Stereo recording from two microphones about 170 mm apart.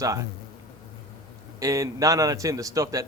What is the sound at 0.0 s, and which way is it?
Speech, 20° right (ahead or behind).